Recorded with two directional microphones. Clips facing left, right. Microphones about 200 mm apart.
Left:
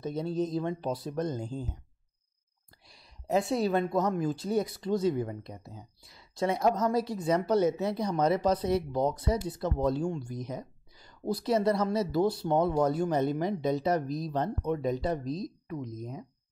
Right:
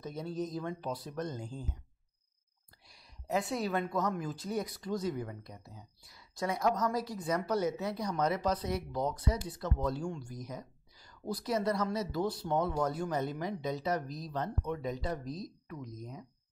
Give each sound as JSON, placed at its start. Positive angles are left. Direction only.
{"t": 0.0, "sound": "speech", "side_deg": 30}
{"t": 2.9, "sound": "speech", "side_deg": 25}
{"t": 14.0, "sound": "speech", "side_deg": 65}
{"t": 14.3, "sound": "speech", "side_deg": 30}